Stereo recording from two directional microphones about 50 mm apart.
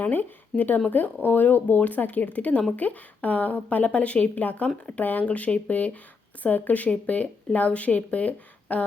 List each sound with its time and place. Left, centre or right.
0.0 s speech: left